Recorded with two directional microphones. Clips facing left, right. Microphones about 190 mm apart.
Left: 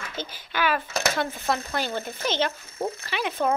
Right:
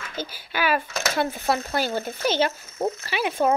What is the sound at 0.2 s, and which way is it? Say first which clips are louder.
Speech: right 1 dB; 10° right (ahead or behind).